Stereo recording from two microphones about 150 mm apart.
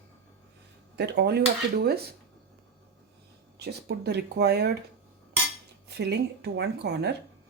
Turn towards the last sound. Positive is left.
turn(degrees=-90)